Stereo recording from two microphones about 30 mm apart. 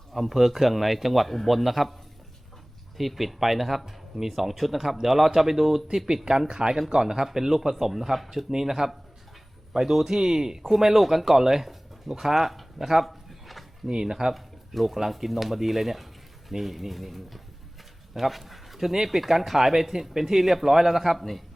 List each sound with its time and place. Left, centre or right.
0.1 s speech: centre
3.0 s speech: centre
6.5 s speech: right; by 12.9 s centre
13.1 s a sound: centre
13.8 s speech: centre
14.3 s speech: centre